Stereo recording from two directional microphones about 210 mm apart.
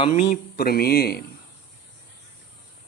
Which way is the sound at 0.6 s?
45° left (ahead or behind).